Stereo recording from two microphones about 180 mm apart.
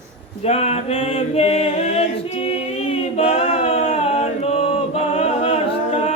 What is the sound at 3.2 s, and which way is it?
A capella, 40° left (ahead or behind).